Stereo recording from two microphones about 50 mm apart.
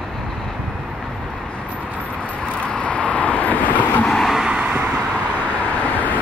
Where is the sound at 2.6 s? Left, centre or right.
Left.